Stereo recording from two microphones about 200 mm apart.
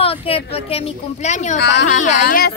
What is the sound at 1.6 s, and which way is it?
Speech, 55° left (ahead or behind).